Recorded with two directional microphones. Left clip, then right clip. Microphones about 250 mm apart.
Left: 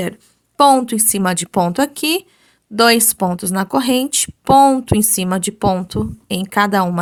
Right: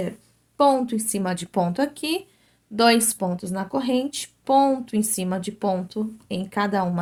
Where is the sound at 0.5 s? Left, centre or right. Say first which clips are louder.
Left 8 dB; left.